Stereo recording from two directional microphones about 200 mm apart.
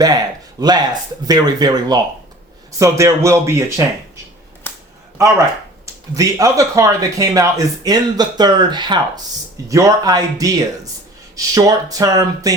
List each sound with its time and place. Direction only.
0.6 s speech: 20° right (ahead or behind)
5.8 s speech: 15° right (ahead or behind)